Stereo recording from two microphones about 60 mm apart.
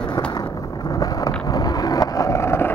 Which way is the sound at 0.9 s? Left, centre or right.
Left.